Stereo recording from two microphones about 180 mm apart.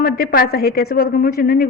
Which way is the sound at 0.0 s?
60° left (ahead or behind).